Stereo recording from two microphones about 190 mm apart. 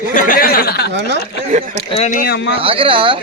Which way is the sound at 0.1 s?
45° left (ahead or behind).